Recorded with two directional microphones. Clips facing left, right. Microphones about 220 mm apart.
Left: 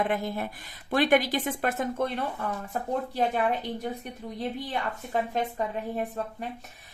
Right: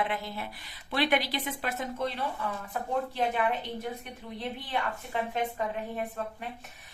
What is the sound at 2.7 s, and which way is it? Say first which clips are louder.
Speech: left 1 dB; 40° left (ahead or behind).